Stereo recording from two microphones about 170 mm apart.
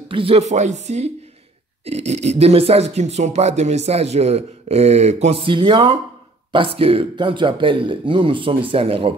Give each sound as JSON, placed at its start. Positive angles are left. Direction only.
{"t": 0.1, "sound": "speech", "side_deg": -35}